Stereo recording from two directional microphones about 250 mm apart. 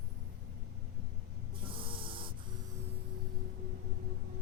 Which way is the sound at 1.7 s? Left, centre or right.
Right.